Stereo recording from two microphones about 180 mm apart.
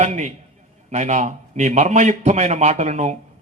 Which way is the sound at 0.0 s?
40° right (ahead or behind).